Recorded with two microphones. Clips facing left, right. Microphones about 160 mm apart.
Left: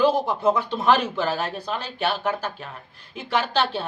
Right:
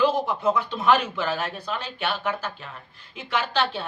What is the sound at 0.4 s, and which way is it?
Speech, 30° left (ahead or behind).